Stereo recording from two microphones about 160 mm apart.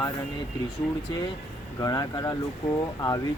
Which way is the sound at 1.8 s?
20° left (ahead or behind).